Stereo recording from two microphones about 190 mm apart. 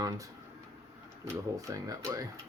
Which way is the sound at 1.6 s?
20° right (ahead or behind).